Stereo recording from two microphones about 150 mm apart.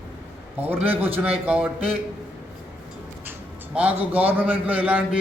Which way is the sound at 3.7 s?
10° right (ahead or behind).